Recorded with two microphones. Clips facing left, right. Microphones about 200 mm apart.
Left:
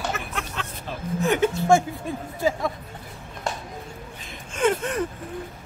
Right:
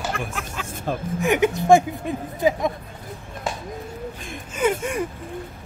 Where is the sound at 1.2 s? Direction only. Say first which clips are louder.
Right 1 dB; 15° right (ahead or behind).